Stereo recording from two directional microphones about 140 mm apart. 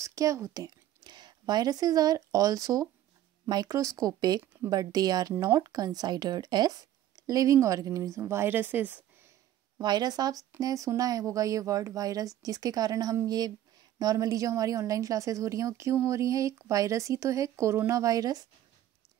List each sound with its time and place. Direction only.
0.0 s a woman's voice: 25° right (ahead or behind)
9.8 s speech: 30° right (ahead or behind)